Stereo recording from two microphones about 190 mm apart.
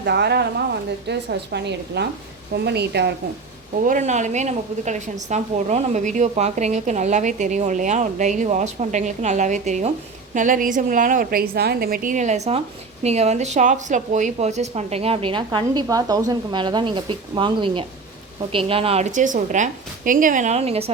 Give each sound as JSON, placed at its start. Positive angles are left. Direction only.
{"t": 0.0, "sound": "a woman's voice", "side_deg": -60}
{"t": 3.8, "sound": "a woman's voice", "side_deg": -40}